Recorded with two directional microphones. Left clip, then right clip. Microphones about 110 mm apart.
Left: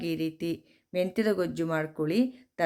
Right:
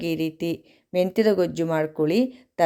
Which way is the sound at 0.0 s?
40° right (ahead or behind).